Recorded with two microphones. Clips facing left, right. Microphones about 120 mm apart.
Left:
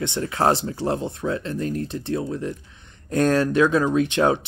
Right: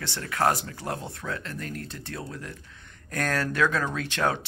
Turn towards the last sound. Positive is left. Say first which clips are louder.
# left 8 dB
turn(degrees=20)  # may be behind; listen again after turning